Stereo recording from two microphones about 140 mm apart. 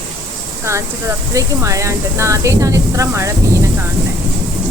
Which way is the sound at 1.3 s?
20° right (ahead or behind).